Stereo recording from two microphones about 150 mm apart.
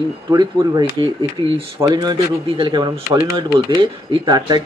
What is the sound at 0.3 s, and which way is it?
Speech, 30° right (ahead or behind).